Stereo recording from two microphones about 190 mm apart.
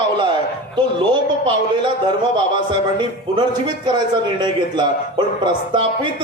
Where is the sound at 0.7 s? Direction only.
25° right (ahead or behind).